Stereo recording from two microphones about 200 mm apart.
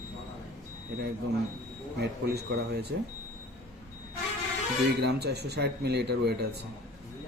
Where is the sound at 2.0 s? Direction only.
55° right (ahead or behind).